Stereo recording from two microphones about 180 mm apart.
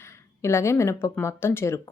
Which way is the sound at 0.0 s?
15° left (ahead or behind).